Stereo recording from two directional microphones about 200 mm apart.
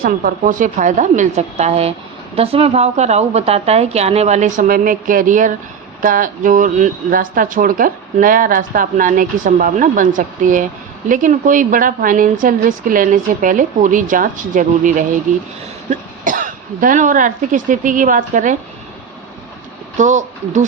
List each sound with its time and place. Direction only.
0.0 s speech: 45° right (ahead or behind)
20.0 s speech: 40° right (ahead or behind)